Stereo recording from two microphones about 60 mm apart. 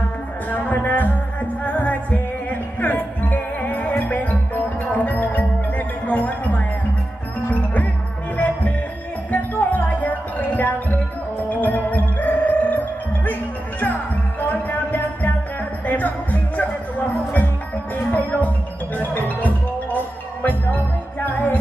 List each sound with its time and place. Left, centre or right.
0.5 s music: left